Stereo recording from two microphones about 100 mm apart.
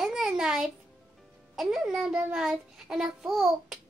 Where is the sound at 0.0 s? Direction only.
5° right (ahead or behind).